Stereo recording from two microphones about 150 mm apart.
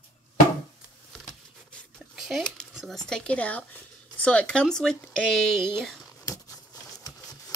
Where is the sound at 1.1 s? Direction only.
5° left (ahead or behind).